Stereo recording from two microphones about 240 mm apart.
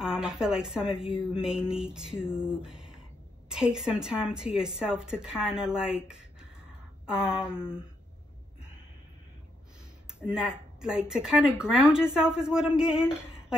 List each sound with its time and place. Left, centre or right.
0.0 s speech: centre
0.8 s a woman's voice: left
1.3 s a woman's voice: centre
7.4 s a sound: centre
10.2 s a woman's voice: centre